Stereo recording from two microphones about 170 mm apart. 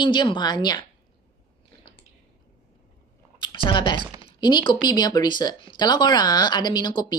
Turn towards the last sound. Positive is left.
turn(degrees=25)  # may be behind; listen again after turning